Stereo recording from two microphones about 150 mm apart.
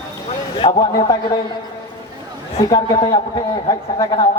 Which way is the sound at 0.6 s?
40° left (ahead or behind).